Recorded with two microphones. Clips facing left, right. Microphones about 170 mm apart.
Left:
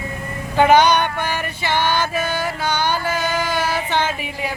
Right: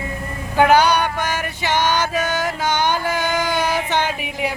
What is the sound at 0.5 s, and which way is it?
Music, 10° right (ahead or behind).